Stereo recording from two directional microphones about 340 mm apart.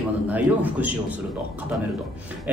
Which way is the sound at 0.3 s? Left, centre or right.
Centre.